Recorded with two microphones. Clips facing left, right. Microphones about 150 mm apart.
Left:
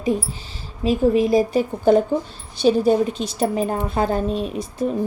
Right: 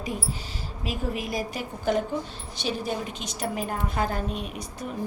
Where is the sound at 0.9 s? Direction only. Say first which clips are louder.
Left 14 dB; 25° left (ahead or behind).